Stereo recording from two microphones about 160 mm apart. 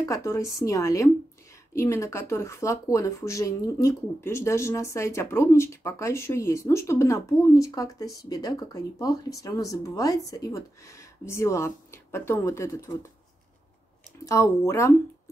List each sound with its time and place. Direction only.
0.1 s speech: 20° left (ahead or behind)
14.2 s speech: 20° left (ahead or behind)